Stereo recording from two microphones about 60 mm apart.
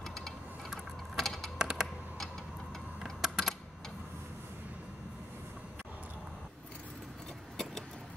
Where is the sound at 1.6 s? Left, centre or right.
Centre.